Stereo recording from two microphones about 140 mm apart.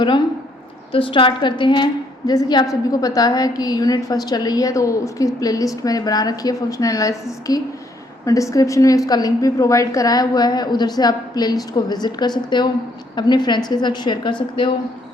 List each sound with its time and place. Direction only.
0.9 s a woman's voice: 40° left (ahead or behind)